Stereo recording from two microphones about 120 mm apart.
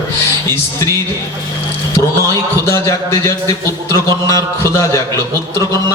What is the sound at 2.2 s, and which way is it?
A man's voice, 25° left (ahead or behind).